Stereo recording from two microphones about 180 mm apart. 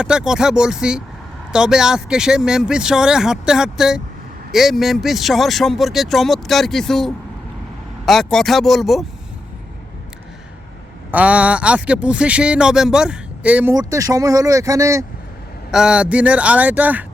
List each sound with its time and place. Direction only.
0.0 s speech: 5° right (ahead or behind)
11.1 s speech: 5° right (ahead or behind)
13.7 s speech: 20° right (ahead or behind)
15.7 s speech: 5° right (ahead or behind)